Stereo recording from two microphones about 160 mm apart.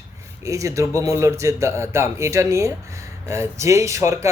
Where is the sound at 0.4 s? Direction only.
20° right (ahead or behind).